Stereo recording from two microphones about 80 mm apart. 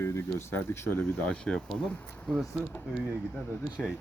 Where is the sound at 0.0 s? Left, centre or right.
Left.